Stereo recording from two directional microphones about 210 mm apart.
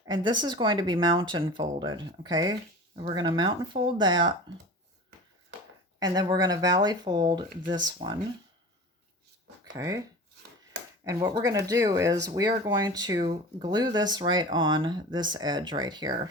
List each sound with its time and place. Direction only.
0.0 s speech: 20° right (ahead or behind)
6.0 s speech: 20° right (ahead or behind)
9.7 s speech: 15° right (ahead or behind)
11.0 s speech: 15° right (ahead or behind)